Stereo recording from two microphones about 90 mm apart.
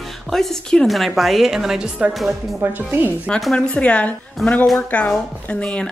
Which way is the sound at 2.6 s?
20° right (ahead or behind).